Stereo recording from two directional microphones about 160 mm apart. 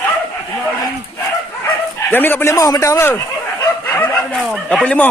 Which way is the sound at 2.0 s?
10° left (ahead or behind).